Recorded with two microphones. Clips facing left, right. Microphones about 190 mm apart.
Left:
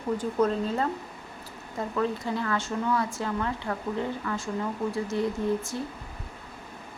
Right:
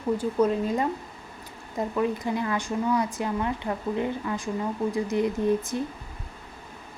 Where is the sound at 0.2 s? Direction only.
10° right (ahead or behind).